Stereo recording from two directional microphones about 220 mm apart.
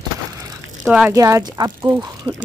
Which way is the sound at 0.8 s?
5° right (ahead or behind).